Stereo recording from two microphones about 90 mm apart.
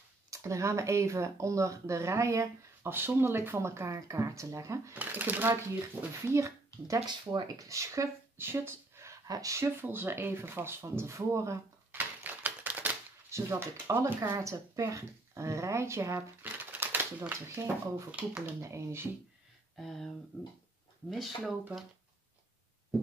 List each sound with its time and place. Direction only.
0.3 s speech: 35° right (ahead or behind)
4.9 s a child's voice: 20° right (ahead or behind)
7.1 s speech: 50° right (ahead or behind)
9.7 s a child's voice: 25° right (ahead or behind)
11.9 s typewriter: 20° right (ahead or behind)
13.3 s speech: 30° right (ahead or behind)
17.6 s speech: 35° right (ahead or behind)
19.8 s speech: centre (ahead or behind)
21.1 s speech: centre (ahead or behind)